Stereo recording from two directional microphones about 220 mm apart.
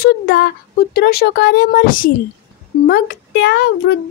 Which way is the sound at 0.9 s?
45° left (ahead or behind).